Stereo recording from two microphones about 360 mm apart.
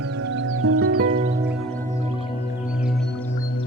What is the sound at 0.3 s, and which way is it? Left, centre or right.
Music, right.